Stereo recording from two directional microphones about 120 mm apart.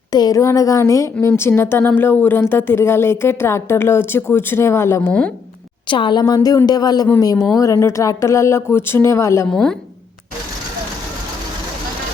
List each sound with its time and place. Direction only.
0.1 s a woman's voice: 30° left (ahead or behind)
5.9 s a woman's voice: 45° left (ahead or behind); by 9.5 s 25° left (ahead or behind)
9.5 s speech: 5° left (ahead or behind)